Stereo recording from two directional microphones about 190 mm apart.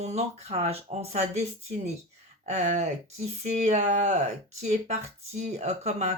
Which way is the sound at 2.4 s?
35° right (ahead or behind).